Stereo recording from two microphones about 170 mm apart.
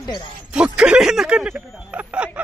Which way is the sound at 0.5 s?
5° right (ahead or behind).